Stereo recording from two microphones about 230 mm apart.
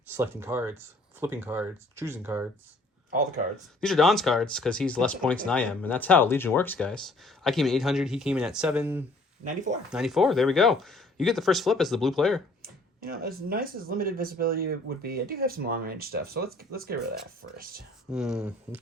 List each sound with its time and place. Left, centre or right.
0.1 s speech: centre
3.8 s speech: centre
9.4 s speech: right
9.9 s speech: centre
12.6 s speech: right
18.1 s speech: centre